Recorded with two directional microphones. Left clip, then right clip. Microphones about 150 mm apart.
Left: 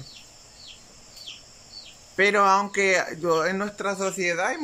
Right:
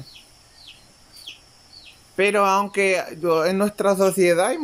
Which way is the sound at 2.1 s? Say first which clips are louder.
Right 1 dB; 10° right (ahead or behind).